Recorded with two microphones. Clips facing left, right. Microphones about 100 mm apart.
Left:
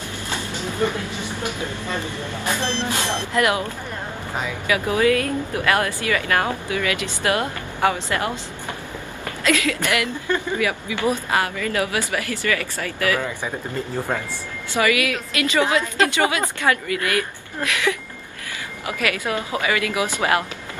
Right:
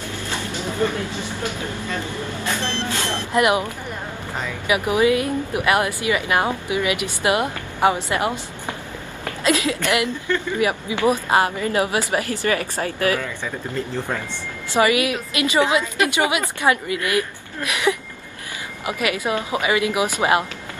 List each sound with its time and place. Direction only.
2.4 s speech: 15° left (ahead or behind)
3.3 s a woman's voice: 20° right (ahead or behind)
13.9 s speech: 15° left (ahead or behind)
14.3 s a woman's voice: 25° right (ahead or behind)